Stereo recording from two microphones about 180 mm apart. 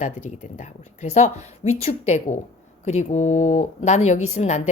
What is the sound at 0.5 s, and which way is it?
A woman's voice, 40° left (ahead or behind).